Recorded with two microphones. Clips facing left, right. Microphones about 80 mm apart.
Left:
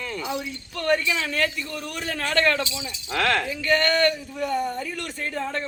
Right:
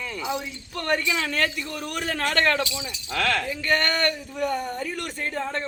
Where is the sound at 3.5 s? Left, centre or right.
Right.